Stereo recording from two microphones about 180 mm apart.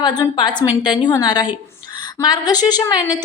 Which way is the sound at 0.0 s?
25° left (ahead or behind).